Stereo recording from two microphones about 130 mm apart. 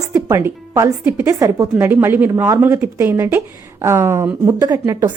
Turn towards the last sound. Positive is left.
turn(degrees=-25)  # may be behind; listen again after turning